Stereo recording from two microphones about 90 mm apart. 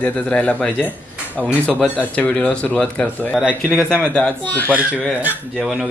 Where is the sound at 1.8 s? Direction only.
10° left (ahead or behind).